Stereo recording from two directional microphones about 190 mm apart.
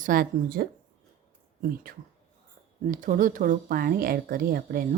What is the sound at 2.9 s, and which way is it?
Speech, 45° right (ahead or behind).